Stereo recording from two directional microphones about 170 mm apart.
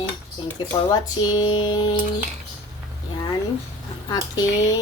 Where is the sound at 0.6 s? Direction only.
25° left (ahead or behind).